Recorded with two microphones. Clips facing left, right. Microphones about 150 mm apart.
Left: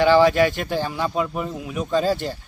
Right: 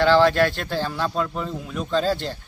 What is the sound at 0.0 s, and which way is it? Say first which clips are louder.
Speech: left 1 dB; 15° left (ahead or behind).